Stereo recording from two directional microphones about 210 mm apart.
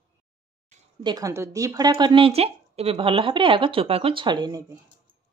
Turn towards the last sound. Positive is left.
turn(degrees=-20)  # may be behind; listen again after turning